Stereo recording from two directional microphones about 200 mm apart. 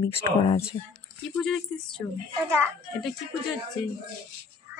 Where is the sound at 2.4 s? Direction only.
15° right (ahead or behind).